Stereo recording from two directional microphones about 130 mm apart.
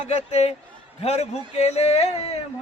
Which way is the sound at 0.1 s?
55° left (ahead or behind).